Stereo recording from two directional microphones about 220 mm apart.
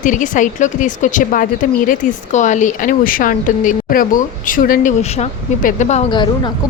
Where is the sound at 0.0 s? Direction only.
35° left (ahead or behind).